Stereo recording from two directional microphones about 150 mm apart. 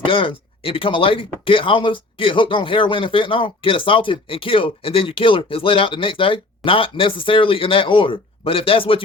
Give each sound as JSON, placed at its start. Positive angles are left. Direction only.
{"t": 0.0, "sound": "speech", "side_deg": 35}